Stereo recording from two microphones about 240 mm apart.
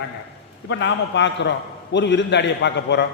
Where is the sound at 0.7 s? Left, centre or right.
Left.